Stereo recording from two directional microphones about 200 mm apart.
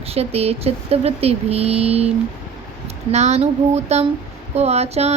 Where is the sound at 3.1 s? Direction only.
35° right (ahead or behind).